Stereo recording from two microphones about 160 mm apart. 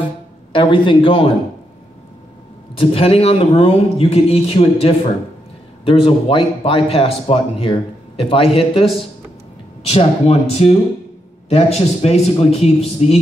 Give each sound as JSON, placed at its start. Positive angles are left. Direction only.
{"t": 0.5, "sound": "speech", "side_deg": 30}
{"t": 2.7, "sound": "speech", "side_deg": 35}
{"t": 9.8, "sound": "speech", "side_deg": 40}